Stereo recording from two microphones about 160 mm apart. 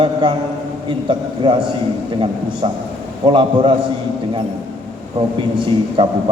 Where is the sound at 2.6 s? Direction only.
30° right (ahead or behind).